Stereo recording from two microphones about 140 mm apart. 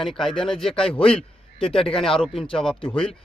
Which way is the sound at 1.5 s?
40° left (ahead or behind).